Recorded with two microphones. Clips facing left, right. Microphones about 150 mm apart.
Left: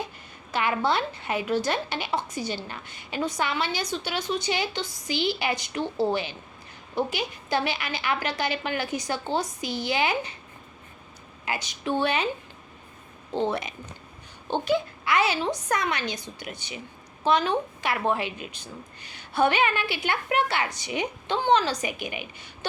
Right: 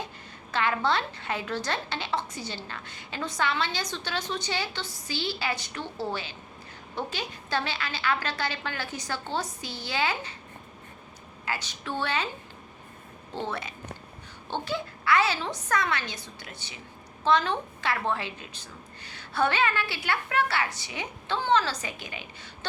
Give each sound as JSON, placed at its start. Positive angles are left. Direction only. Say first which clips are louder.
{"t": 0.5, "sound": "a woman's voice", "louder": "left 2 dB", "side_deg": 15}
{"t": 11.4, "sound": "a woman's voice", "louder": "left 5 dB", "side_deg": 15}
{"t": 13.3, "sound": "a woman's voice", "louder": "left 7 dB", "side_deg": 15}